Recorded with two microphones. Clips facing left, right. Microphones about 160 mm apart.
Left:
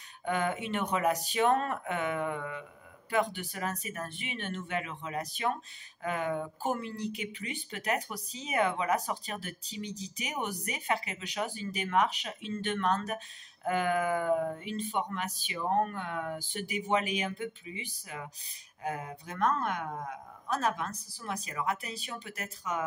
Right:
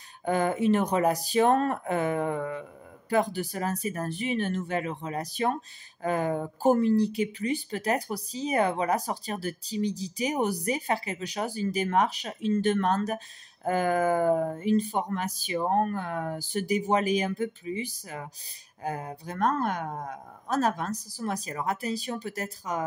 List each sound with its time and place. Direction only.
0.2 s speech: 35° right (ahead or behind)